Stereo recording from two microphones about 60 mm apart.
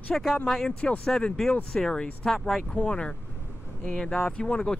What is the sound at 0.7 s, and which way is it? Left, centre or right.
Speech, centre.